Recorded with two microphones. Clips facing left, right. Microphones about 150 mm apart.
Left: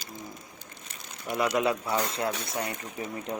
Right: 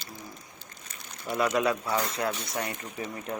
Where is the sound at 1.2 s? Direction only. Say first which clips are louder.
Even; 15° left (ahead or behind).